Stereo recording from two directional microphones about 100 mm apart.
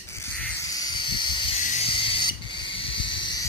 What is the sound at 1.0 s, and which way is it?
Hiss, 50° left (ahead or behind).